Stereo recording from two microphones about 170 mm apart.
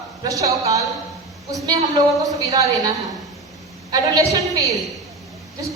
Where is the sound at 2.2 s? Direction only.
20° right (ahead or behind).